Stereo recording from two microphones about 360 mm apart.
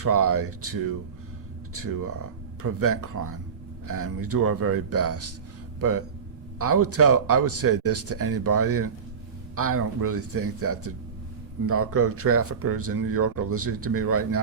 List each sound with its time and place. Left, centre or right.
0.0 s speech: right
6.6 s speech: right